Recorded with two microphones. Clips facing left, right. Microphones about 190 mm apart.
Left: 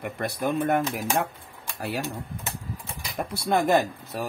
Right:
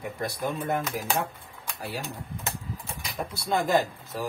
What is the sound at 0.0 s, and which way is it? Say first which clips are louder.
Speech: left 3 dB; 60° left (ahead or behind).